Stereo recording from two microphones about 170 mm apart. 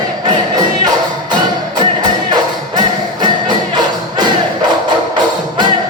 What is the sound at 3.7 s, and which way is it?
Music, 25° right (ahead or behind).